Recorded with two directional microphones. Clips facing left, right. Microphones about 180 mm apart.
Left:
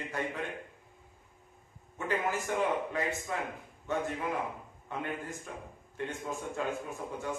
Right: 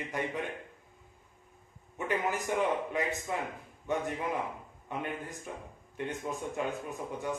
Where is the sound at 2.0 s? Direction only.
15° right (ahead or behind).